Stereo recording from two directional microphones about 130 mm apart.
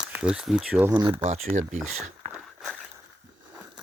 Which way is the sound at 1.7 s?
Centre (ahead or behind).